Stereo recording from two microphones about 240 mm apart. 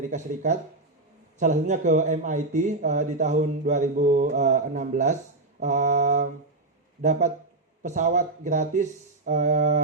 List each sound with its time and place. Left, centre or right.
1.4 s speech: right
5.6 s mantra: right
7.0 s speech: right